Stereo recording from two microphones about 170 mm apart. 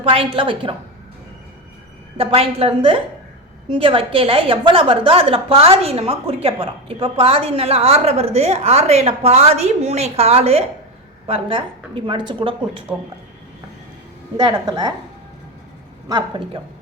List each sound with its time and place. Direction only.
0.0 s a woman's voice: 35° right (ahead or behind)
2.1 s a woman's voice: 35° right (ahead or behind)
14.3 s a woman's voice: 25° right (ahead or behind)
16.0 s a woman's voice: 25° right (ahead or behind)